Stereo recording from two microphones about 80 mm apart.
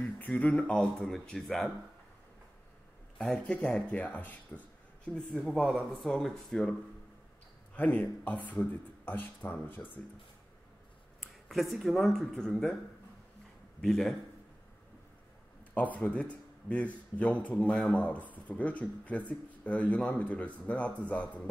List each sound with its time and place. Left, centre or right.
0.0 s speech: centre
0.7 s speech: centre
3.2 s speech: centre
5.4 s speech: centre
7.7 s speech: centre
11.4 s speech: centre
13.7 s a man's voice: centre
15.7 s speech: centre